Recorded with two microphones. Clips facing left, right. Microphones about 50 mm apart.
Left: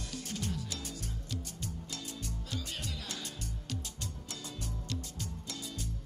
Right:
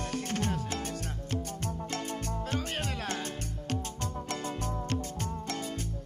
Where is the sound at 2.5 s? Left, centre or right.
Right.